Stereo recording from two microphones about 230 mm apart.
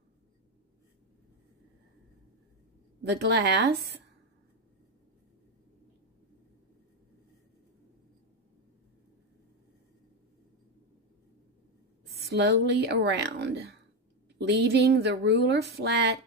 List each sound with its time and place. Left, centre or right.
3.0 s speech: right
12.3 s speech: right